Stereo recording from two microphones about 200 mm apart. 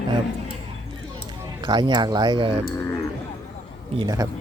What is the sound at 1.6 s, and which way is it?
Speech, 20° right (ahead or behind).